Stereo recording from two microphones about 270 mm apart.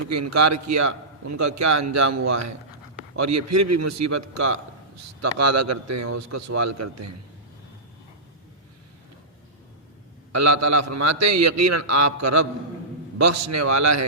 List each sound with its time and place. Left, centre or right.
0.1 s a man's voice: right
5.4 s a man's voice: right
10.3 s a man's voice: right
13.1 s a man's voice: right